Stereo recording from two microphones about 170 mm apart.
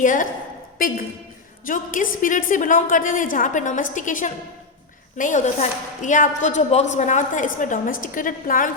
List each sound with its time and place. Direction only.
0.0 s a woman's voice: 50° left (ahead or behind)